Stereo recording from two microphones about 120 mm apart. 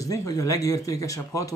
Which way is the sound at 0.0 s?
30° left (ahead or behind).